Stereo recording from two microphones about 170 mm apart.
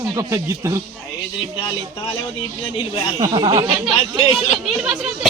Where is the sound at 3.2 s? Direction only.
25° right (ahead or behind).